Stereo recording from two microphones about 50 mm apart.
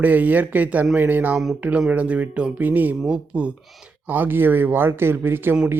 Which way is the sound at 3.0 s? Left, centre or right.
Right.